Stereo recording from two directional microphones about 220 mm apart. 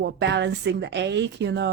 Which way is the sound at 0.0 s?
50° right (ahead or behind).